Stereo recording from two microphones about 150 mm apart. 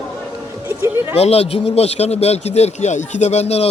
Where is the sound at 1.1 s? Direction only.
40° left (ahead or behind).